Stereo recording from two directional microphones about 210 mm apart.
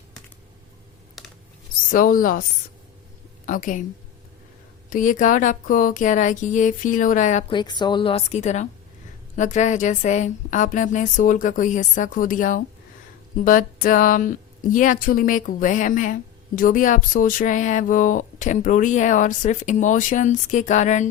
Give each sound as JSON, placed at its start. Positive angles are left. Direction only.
{"t": 1.2, "sound": "a sound", "side_deg": 0}
{"t": 1.9, "sound": "speech", "side_deg": 40}
{"t": 3.4, "sound": "speech", "side_deg": 40}
{"t": 4.9, "sound": "speech", "side_deg": 40}
{"t": 7.5, "sound": "a woman's voice", "side_deg": 20}